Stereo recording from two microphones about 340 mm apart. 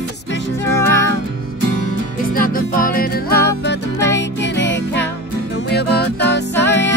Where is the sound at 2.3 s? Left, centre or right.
Left.